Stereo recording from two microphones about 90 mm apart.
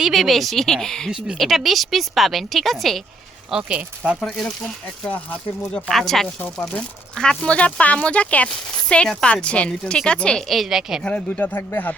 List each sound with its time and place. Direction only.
0.0 s speech: centre (ahead or behind)
3.7 s speech: 15° right (ahead or behind)
4.2 s speech: 5° left (ahead or behind)
5.1 s a woman's voice: 15° left (ahead or behind)
5.9 s a woman's voice: 5° left (ahead or behind)
11.0 s speech: 15° left (ahead or behind)